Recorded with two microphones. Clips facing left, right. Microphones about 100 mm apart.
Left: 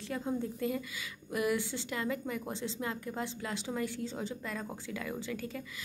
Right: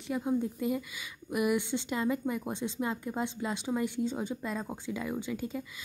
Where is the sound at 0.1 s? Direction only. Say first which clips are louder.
Right 5 dB; 15° right (ahead or behind).